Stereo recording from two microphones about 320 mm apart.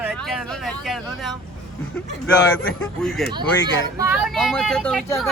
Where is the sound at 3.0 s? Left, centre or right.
Centre.